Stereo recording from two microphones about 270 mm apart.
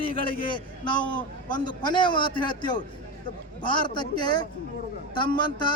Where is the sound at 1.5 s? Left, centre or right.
Centre.